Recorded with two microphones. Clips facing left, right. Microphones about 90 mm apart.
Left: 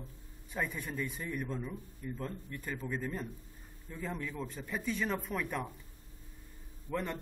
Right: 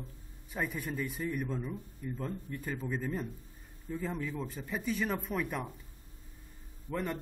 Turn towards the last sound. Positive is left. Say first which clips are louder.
# right 1 dB
turn(degrees=-5)  # may be behind; listen again after turning